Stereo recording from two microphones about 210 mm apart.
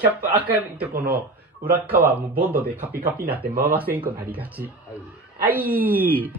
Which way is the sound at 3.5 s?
40° right (ahead or behind).